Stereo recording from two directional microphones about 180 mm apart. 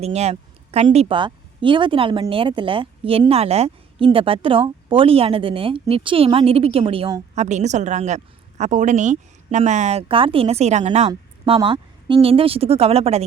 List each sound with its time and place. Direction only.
0.0 s a woman's voice: 35° right (ahead or behind)